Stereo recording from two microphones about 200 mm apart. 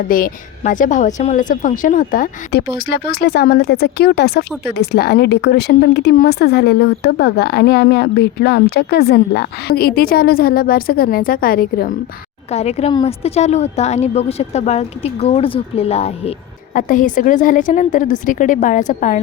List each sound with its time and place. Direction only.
0.1 s a woman's voice: 40° left (ahead or behind)
12.5 s a woman's voice: 30° left (ahead or behind)
16.7 s a woman's voice: 40° left (ahead or behind)